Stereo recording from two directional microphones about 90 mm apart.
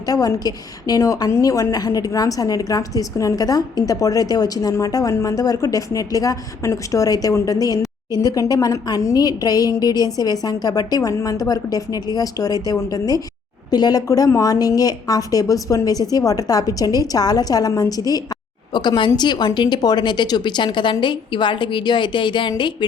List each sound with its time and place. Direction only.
0.1 s a woman's voice: 45° left (ahead or behind)
18.7 s speech: 55° left (ahead or behind)